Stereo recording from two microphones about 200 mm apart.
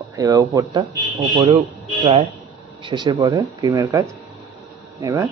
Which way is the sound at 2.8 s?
25° right (ahead or behind).